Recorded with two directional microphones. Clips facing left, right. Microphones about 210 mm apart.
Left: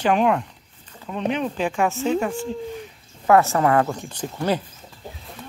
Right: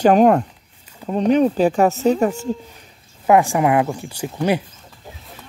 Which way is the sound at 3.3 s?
15° right (ahead or behind).